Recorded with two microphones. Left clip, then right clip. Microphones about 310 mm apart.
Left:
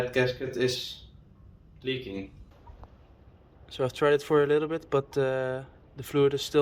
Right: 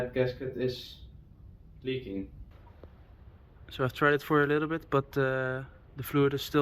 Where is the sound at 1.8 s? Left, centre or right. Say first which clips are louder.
Left 2 dB; centre.